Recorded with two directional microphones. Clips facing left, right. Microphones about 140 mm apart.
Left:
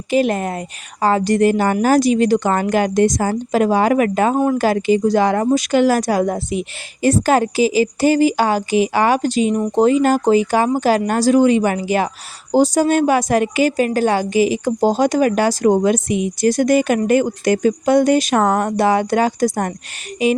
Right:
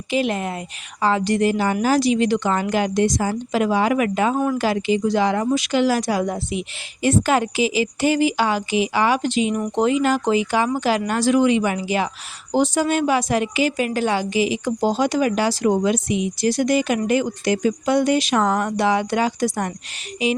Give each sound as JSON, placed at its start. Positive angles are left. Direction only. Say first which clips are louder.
{"t": 0.1, "sound": "a woman's voice", "louder": "left 5 dB", "side_deg": 45}